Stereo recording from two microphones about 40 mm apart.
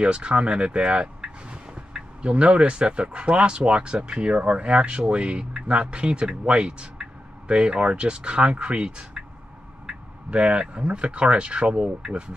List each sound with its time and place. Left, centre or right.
0.0 s speech: right